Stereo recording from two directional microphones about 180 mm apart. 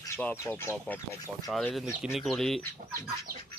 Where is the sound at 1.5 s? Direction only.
Centre (ahead or behind).